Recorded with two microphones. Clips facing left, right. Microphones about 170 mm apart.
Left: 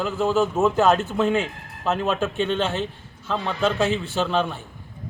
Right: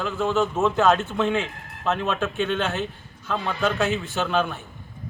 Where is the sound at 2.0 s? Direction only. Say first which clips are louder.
Left 2 dB; 35° left (ahead or behind).